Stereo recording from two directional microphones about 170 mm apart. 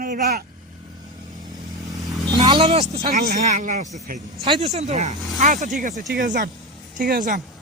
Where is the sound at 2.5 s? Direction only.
35° right (ahead or behind).